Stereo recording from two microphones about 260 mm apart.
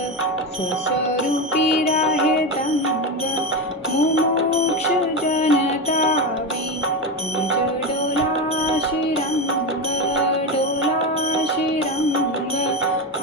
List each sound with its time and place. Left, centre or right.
5.3 s music: left